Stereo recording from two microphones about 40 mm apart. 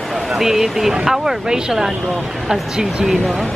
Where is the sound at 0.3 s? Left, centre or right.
Centre.